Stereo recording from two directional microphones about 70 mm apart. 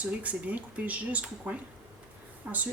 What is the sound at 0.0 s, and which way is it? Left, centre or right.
Speech, right.